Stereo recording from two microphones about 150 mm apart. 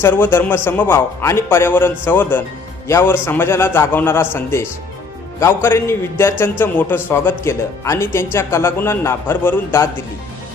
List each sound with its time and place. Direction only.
0.0 s speech: 15° left (ahead or behind)